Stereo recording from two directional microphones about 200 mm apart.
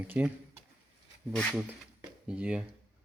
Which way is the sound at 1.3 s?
5° left (ahead or behind).